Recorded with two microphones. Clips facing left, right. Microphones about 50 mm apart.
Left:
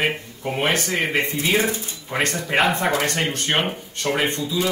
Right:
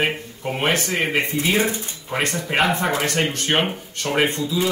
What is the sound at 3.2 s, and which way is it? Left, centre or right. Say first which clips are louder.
Speech: right 2 dB; centre.